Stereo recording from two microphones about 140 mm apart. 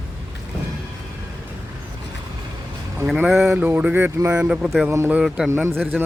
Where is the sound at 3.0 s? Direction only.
5° right (ahead or behind).